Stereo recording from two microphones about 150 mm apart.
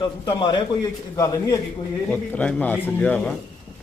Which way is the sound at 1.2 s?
20° left (ahead or behind).